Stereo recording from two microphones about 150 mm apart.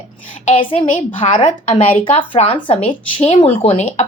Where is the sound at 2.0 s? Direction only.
35° left (ahead or behind).